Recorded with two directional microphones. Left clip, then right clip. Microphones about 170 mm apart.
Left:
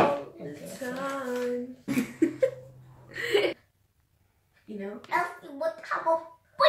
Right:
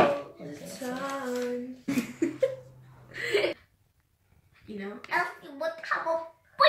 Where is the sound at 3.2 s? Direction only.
35° left (ahead or behind).